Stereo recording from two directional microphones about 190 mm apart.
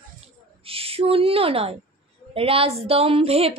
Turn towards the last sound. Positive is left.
turn(degrees=-30)  # may be behind; listen again after turning